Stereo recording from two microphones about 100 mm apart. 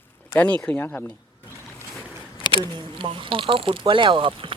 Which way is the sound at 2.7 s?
55° right (ahead or behind).